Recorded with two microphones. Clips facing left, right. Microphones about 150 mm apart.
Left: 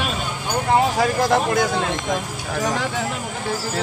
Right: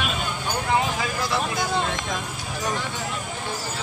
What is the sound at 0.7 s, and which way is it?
Speech, 45° left (ahead or behind).